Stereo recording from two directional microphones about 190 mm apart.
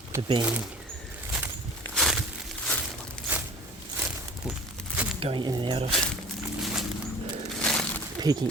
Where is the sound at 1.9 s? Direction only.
Centre (ahead or behind).